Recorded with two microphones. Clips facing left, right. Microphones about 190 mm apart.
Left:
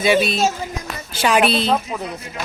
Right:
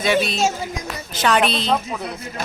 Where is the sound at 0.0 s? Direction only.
5° left (ahead or behind).